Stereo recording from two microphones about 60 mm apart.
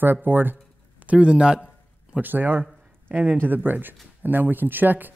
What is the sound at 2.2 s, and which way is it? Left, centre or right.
Speech, right.